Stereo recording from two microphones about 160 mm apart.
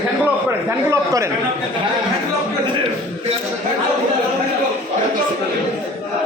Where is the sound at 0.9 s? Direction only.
20° right (ahead or behind).